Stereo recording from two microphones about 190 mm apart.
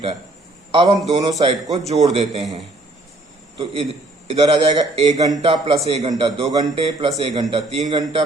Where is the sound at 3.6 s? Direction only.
30° right (ahead or behind).